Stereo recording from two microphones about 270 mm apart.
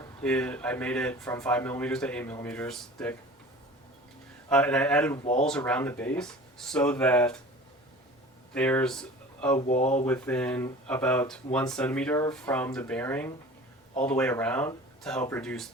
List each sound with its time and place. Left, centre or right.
0.0 s speech: centre
4.4 s speech: centre
5.2 s speech: left
5.5 s speech: centre
8.5 s speech: centre
9.6 s speech: left
10.1 s speech: centre